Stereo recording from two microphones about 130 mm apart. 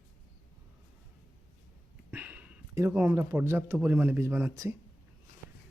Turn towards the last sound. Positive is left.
turn(degrees=-25)  # may be behind; listen again after turning